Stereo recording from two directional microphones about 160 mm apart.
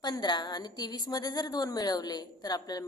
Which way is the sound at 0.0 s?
25° left (ahead or behind).